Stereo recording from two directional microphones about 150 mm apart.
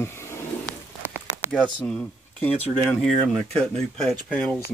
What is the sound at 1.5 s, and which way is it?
Speech, 5° left (ahead or behind).